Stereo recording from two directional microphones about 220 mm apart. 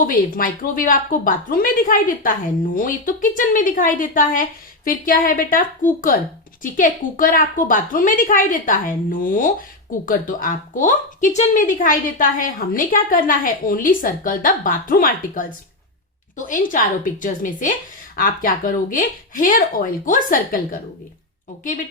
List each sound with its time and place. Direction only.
0.1 s speech: 40° left (ahead or behind)